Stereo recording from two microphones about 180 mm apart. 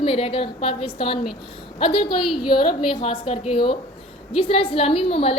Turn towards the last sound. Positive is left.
turn(degrees=30)  # may be behind; listen again after turning